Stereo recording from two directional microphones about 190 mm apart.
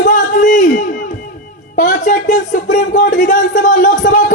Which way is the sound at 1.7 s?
40° left (ahead or behind).